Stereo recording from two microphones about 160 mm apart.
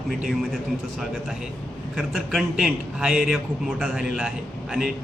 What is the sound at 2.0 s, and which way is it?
A man's voice, centre (ahead or behind).